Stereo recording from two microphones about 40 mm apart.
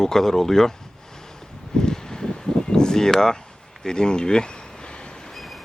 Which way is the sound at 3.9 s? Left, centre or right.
Centre.